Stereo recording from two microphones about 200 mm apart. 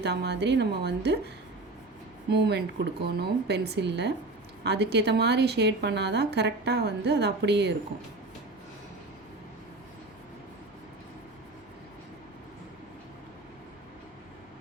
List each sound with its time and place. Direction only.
0.0 s a woman's voice: 55° right (ahead or behind)
2.3 s a woman's voice: 55° right (ahead or behind)